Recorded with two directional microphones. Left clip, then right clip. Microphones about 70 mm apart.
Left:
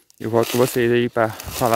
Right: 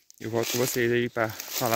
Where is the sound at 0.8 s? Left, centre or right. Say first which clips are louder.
Left 7 dB; left.